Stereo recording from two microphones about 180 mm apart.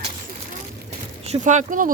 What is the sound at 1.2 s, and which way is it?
Speech, 45° right (ahead or behind).